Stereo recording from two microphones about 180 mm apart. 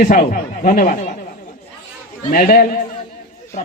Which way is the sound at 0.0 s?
45° left (ahead or behind).